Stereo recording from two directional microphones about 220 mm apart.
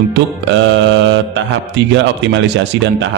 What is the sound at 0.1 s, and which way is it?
Mantra, 55° right (ahead or behind).